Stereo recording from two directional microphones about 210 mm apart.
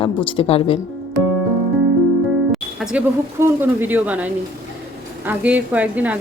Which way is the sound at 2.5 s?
5° right (ahead or behind).